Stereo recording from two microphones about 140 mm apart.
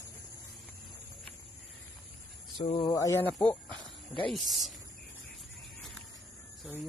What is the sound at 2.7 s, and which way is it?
Speech, 30° left (ahead or behind).